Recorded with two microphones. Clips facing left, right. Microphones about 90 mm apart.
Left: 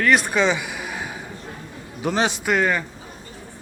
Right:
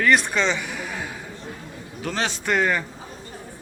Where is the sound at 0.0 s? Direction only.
5° left (ahead or behind).